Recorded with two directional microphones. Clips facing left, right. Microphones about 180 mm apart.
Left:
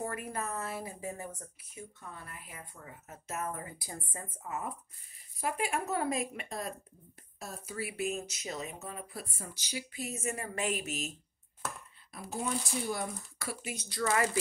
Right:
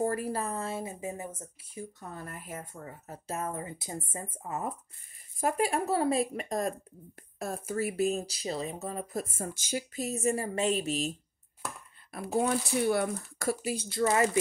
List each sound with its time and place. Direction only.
0.0 s speech: 35° right (ahead or behind); by 1.3 s 20° right (ahead or behind)
1.8 s speech: 40° right (ahead or behind)
7.3 s speech: 55° right (ahead or behind); by 11.1 s 30° right (ahead or behind)
12.1 s speech: 60° right (ahead or behind)
13.7 s speech: 30° right (ahead or behind)